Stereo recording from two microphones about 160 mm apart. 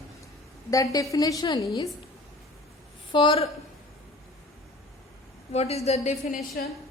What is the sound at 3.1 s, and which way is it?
Speech, 35° left (ahead or behind).